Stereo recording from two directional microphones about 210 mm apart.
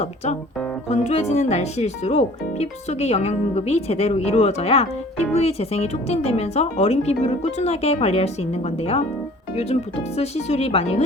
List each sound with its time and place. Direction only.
0.9 s speech: 30° left (ahead or behind)
10.2 s speech: 30° left (ahead or behind)